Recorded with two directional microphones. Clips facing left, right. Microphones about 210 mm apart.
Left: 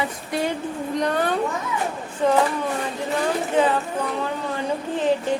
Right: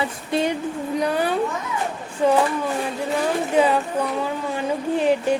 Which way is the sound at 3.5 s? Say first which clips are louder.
Right 2 dB; 10° right (ahead or behind).